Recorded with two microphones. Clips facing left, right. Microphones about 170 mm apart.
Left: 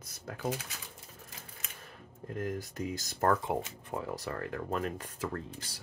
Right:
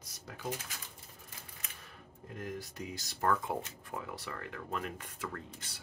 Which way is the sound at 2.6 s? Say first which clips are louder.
Left 6 dB; 45° left (ahead or behind).